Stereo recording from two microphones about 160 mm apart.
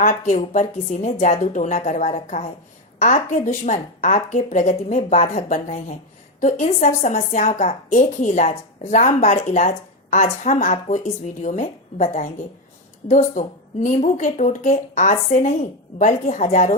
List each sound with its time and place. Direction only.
0.0 s a woman's voice: 50° left (ahead or behind)